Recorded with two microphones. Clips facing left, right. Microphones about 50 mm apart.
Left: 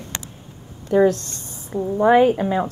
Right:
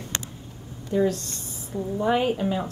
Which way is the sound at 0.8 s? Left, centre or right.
Left.